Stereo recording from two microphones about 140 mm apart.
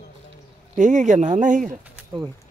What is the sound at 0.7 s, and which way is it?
Speech, 65° right (ahead or behind).